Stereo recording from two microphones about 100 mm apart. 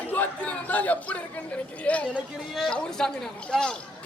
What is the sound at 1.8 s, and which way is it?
A man's voice, 15° left (ahead or behind).